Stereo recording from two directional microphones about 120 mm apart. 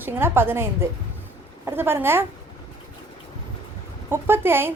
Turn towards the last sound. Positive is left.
turn(degrees=-20)  # may be behind; listen again after turning